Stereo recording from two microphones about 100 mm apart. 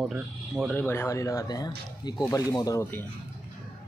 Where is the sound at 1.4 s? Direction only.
45° left (ahead or behind).